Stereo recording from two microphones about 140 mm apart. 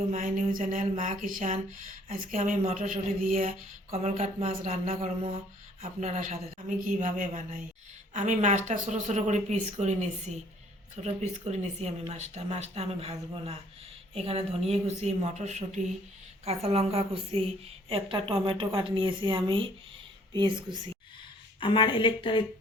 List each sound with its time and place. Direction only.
0.1 s speech: 70° right (ahead or behind)
2.0 s speech: 75° right (ahead or behind)
2.4 s speech: 50° right (ahead or behind)
2.7 s a man's voice: 85° right
3.2 s speech: 60° right (ahead or behind)
3.9 s speech: 50° right (ahead or behind)
6.7 s speech: 65° right (ahead or behind); by 20.7 s 35° right (ahead or behind)
21.6 s a woman's voice: 35° left (ahead or behind)